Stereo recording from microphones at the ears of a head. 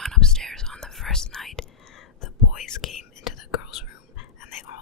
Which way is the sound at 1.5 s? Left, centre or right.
Left.